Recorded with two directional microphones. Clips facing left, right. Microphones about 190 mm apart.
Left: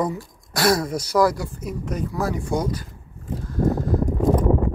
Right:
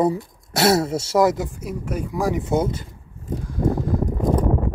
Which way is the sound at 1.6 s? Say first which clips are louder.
Even; 10° right (ahead or behind).